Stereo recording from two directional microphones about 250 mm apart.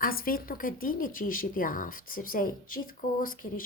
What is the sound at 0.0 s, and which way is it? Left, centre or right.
Speech, left.